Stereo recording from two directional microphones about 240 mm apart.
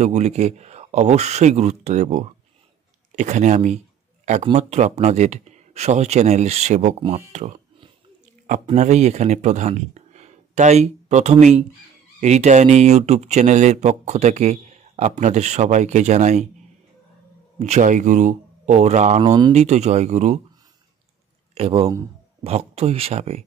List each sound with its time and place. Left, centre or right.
0.0 s speech: right
17.6 s speech: right
21.5 s speech: right